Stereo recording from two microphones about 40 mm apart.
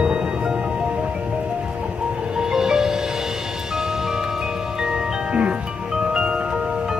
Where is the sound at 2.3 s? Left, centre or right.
Centre.